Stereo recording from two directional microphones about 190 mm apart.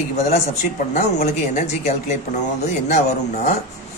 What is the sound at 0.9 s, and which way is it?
A man's voice, 35° left (ahead or behind).